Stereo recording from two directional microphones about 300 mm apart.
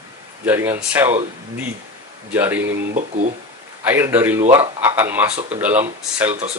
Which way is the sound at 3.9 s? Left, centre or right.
Centre.